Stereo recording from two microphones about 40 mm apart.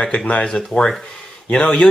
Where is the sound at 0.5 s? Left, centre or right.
Centre.